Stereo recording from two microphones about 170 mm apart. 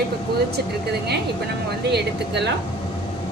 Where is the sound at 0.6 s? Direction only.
70° right (ahead or behind).